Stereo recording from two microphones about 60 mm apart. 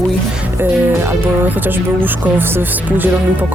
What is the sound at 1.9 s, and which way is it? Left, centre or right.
Speech, right.